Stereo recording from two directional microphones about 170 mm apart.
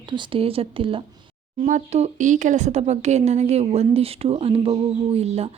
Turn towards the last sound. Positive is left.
turn(degrees=-35)  # may be behind; listen again after turning